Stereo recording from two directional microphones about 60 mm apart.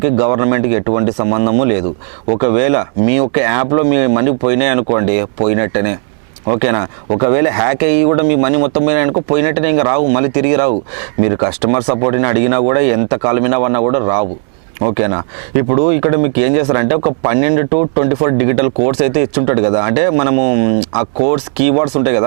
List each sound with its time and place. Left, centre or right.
0.0 s speech: right